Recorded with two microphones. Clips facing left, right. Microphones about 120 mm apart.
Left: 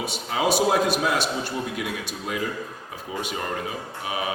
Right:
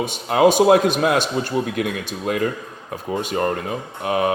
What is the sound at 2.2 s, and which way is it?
Speech, 60° right (ahead or behind).